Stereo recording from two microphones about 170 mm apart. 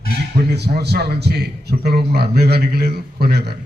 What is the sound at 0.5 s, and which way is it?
A man's voice, 75° right (ahead or behind).